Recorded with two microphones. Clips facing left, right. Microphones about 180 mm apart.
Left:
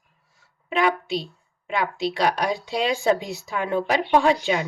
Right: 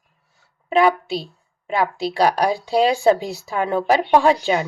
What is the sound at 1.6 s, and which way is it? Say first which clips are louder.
Speech: right 3 dB; 35° right (ahead or behind).